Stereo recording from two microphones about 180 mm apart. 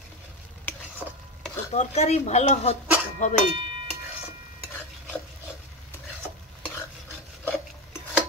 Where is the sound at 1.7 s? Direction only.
40° left (ahead or behind).